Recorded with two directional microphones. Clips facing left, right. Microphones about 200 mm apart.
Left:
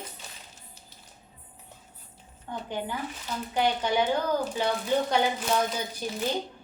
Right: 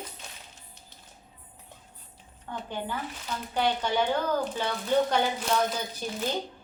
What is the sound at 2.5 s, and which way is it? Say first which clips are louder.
Speech: left 1 dB; 15° left (ahead or behind).